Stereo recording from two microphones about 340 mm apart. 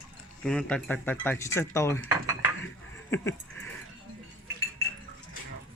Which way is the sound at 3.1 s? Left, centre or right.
Centre.